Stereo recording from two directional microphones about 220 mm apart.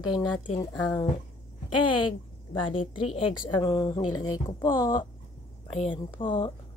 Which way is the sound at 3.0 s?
25° left (ahead or behind).